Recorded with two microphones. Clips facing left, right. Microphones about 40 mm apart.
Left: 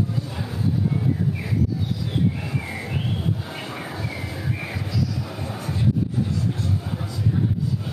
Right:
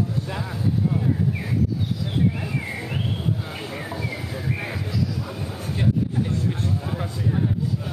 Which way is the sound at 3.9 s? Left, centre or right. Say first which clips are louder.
Right 1 dB; centre.